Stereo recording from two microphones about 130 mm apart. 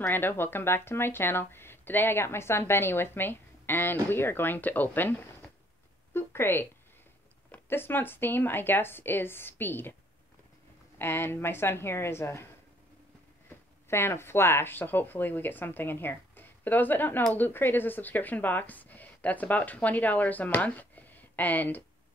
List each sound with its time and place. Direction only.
0.0 s speech: 15° left (ahead or behind)
11.0 s speech: 15° left (ahead or behind)
13.8 s speech: 20° left (ahead or behind)